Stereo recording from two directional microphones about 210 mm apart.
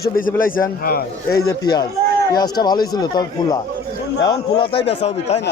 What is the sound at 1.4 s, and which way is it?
Speech, 20° left (ahead or behind).